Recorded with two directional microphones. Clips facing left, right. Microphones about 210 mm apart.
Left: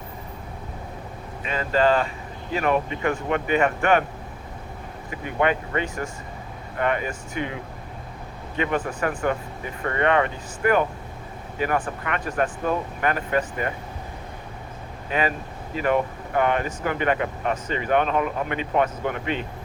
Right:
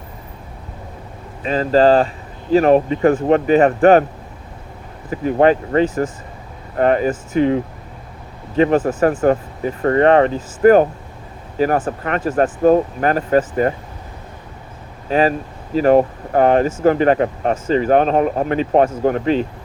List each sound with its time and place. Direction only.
1.5 s speech: 35° right (ahead or behind)
5.1 s speech: 35° right (ahead or behind)
15.1 s speech: 40° right (ahead or behind)